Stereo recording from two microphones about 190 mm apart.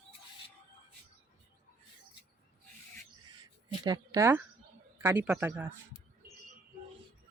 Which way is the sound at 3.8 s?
20° right (ahead or behind).